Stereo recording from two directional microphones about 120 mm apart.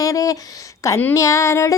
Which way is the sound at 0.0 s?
30° left (ahead or behind).